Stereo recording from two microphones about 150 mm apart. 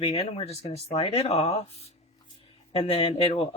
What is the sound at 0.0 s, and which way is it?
Speech, 40° left (ahead or behind).